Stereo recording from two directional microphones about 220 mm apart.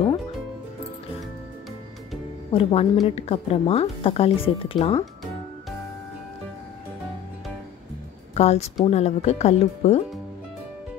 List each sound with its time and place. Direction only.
2.5 s speech: 25° left (ahead or behind)
8.4 s speech: 30° left (ahead or behind)